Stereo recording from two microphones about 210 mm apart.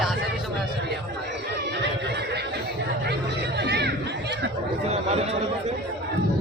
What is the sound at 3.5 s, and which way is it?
Chatter, 55° right (ahead or behind).